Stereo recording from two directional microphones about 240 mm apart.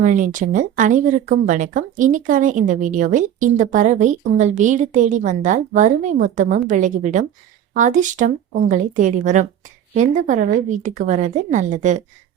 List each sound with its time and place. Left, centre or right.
0.0 s speech: right